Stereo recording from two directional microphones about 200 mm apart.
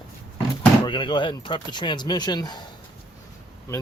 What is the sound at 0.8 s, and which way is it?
Speech, 25° left (ahead or behind).